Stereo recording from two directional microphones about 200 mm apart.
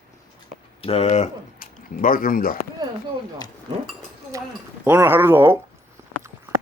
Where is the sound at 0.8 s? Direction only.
30° left (ahead or behind); by 2.6 s 45° left (ahead or behind).